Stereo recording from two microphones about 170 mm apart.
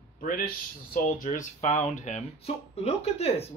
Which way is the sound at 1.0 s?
50° left (ahead or behind).